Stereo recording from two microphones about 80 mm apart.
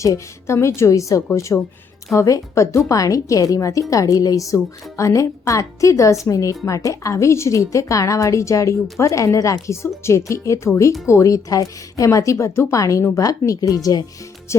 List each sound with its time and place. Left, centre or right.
0.0 s a woman's voice: left